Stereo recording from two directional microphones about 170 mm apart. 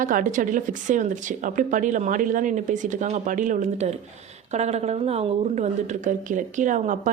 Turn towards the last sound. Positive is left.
turn(degrees=-50)  # may be behind; listen again after turning